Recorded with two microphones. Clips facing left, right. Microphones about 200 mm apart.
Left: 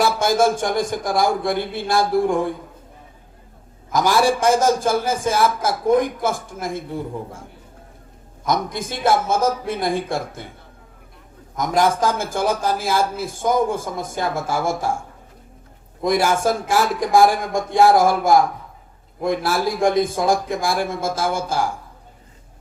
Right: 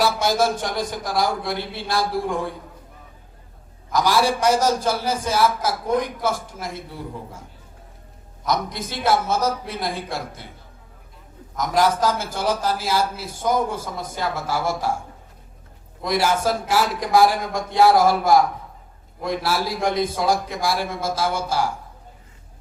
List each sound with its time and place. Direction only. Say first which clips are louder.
0.0 s a man's voice: left 3 dB; 50° left (ahead or behind)
3.9 s a man's voice: left 2 dB; 50° left (ahead or behind)
8.4 s a man's voice: left 2 dB; 50° left (ahead or behind)
11.5 s a man's voice: left 1 dB; 50° left (ahead or behind)
16.0 s a man's voice: left 3 dB; 50° left (ahead or behind)